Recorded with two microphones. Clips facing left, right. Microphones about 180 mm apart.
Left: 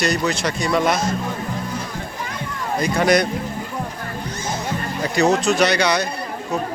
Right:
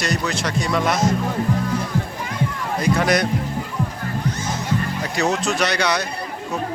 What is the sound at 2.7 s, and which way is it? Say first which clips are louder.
Speech: left 2 dB; centre (ahead or behind).